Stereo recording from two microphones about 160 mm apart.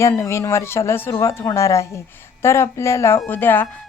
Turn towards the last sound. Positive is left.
turn(degrees=10)  # may be behind; listen again after turning